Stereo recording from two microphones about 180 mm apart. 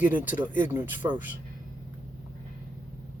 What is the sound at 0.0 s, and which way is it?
Speech, 10° right (ahead or behind).